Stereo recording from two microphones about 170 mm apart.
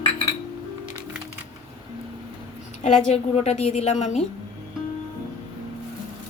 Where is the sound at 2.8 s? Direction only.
40° left (ahead or behind).